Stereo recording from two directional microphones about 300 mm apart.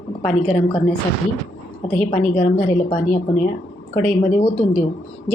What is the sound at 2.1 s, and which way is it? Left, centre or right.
Speech, left.